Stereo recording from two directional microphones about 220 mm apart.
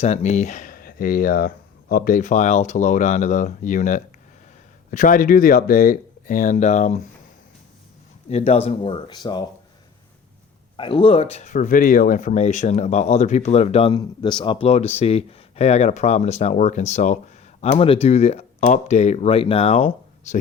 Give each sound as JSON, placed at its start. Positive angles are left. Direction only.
{"t": 0.0, "sound": "speech", "side_deg": 30}
{"t": 8.3, "sound": "speech", "side_deg": 30}
{"t": 10.8, "sound": "speech", "side_deg": 25}